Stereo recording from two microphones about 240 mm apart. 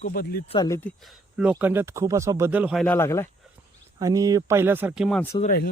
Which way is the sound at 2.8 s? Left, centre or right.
Centre.